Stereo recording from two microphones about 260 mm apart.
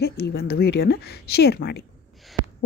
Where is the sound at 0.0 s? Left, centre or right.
Left.